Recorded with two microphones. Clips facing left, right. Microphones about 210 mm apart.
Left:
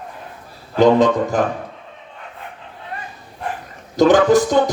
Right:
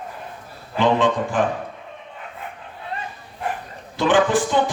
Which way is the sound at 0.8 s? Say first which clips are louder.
Left 6 dB; 40° left (ahead or behind).